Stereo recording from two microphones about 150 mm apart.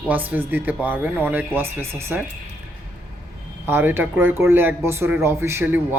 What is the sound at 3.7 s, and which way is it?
Speech, 15° right (ahead or behind).